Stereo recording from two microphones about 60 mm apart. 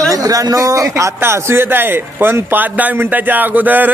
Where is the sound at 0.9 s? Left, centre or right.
Right.